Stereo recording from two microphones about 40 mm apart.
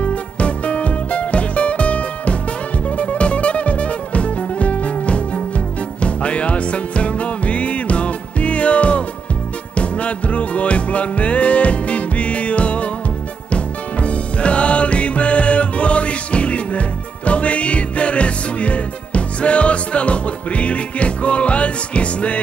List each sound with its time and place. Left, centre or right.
0.0 s music: left